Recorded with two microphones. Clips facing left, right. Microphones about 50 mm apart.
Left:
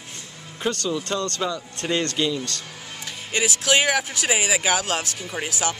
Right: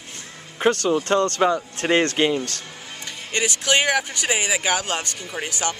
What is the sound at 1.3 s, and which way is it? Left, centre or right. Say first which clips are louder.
Speech: right 7 dB; right.